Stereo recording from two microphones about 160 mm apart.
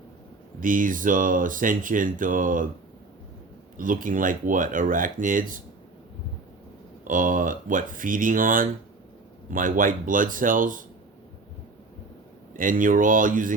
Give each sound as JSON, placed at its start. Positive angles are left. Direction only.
{"t": 0.6, "sound": "speech", "side_deg": -55}
{"t": 3.8, "sound": "speech", "side_deg": -55}
{"t": 7.0, "sound": "speech", "side_deg": -55}
{"t": 12.5, "sound": "speech", "side_deg": -55}